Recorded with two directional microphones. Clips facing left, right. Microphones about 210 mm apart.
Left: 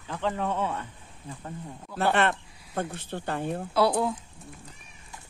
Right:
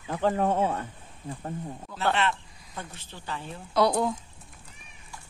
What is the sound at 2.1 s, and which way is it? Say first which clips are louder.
Speech: left 3 dB; 55° left (ahead or behind).